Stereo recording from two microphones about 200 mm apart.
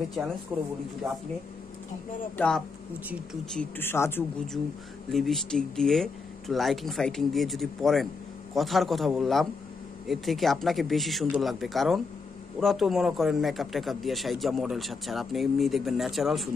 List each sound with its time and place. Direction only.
0.5 s a man's voice: centre (ahead or behind)
2.3 s a man's voice: 5° left (ahead or behind)
5.1 s a man's voice: centre (ahead or behind)